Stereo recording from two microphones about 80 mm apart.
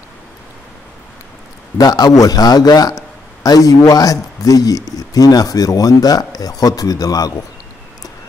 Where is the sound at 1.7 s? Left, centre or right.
Left.